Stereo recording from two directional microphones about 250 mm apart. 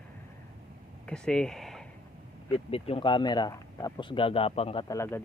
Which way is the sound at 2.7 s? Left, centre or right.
Left.